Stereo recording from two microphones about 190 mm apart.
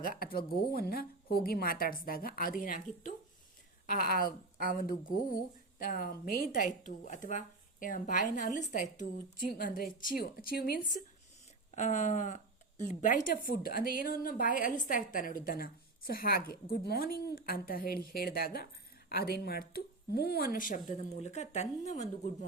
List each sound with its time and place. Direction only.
0.0 s a woman's voice: 50° left (ahead or behind)
11.7 s a woman's voice: 40° left (ahead or behind)